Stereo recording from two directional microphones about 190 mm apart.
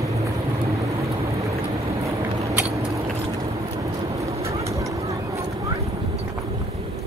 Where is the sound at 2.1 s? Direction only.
15° right (ahead or behind).